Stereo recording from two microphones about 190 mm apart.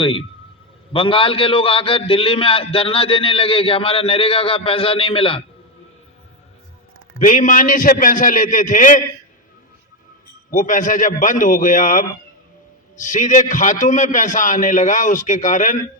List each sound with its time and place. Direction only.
0.0 s a man's voice: 30° left (ahead or behind)
7.2 s a man's voice: 45° left (ahead or behind)
10.5 s a man's voice: 45° left (ahead or behind)